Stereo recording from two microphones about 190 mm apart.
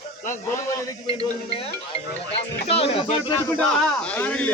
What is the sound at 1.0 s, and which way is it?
Music, 30° left (ahead or behind).